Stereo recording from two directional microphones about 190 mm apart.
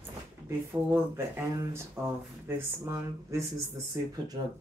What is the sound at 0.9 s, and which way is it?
Speech, 10° right (ahead or behind).